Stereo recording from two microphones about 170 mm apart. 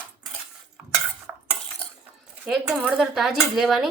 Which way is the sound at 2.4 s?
5° right (ahead or behind).